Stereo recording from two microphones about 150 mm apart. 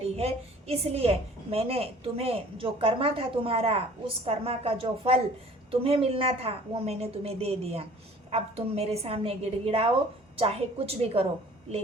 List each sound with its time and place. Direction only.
0.0 s a woman's voice: 45° right (ahead or behind)